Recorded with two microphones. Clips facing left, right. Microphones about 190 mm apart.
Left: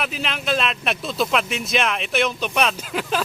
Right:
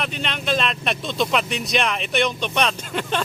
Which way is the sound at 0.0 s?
5° left (ahead or behind).